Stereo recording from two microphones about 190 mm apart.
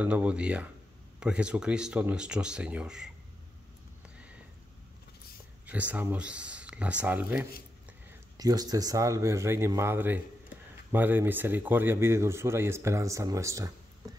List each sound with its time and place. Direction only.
0.0 s speech: 5° right (ahead or behind)
5.7 s speech: 5° right (ahead or behind)
8.4 s speech: 20° right (ahead or behind)
14.0 s a sound: 20° right (ahead or behind)